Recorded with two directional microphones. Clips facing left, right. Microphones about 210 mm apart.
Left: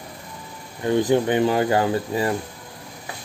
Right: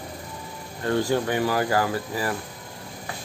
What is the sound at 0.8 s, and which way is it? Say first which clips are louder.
Speech: left 4 dB; 15° left (ahead or behind).